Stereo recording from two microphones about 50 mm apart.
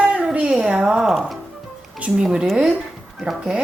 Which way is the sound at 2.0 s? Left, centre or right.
Right.